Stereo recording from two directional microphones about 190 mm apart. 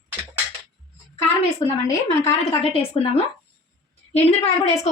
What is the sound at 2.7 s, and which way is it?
Speech, 30° left (ahead or behind).